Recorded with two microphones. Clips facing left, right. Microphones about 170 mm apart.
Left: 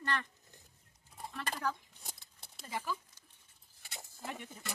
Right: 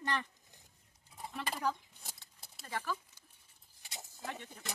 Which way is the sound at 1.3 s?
15° right (ahead or behind).